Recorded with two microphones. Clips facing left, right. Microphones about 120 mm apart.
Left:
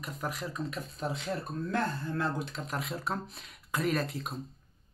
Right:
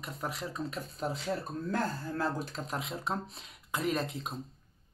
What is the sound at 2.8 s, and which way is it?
Speech, 20° right (ahead or behind).